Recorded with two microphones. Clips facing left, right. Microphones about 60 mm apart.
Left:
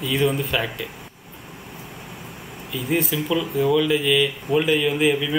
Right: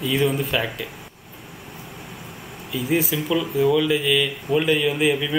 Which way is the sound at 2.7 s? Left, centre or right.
Centre.